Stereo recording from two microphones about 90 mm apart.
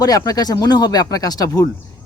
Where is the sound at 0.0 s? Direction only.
45° left (ahead or behind).